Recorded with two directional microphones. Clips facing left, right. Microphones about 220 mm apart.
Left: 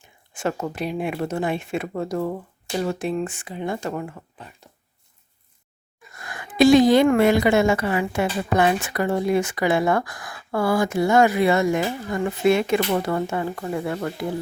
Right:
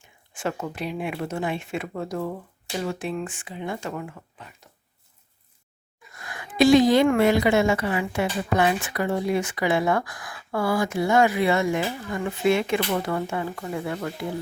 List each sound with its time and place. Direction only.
0.3 s speech: 40° left (ahead or behind)
6.6 s a woman's voice: 50° left (ahead or behind)